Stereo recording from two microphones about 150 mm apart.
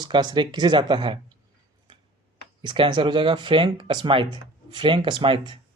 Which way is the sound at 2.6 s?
30° right (ahead or behind).